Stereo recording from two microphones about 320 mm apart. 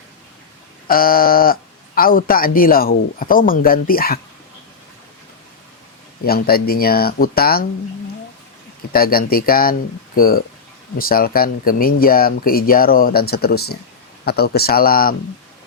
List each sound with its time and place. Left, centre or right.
0.9 s speech: left
6.2 s speech: left
8.9 s speech: left